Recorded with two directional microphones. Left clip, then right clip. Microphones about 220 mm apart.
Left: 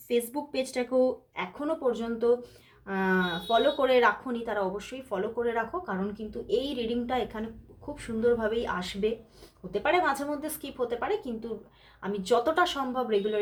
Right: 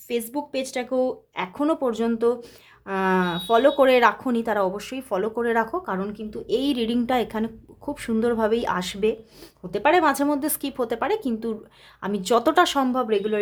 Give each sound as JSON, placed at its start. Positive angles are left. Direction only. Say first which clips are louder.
{"t": 0.1, "sound": "speech", "louder": "right 2 dB", "side_deg": -35}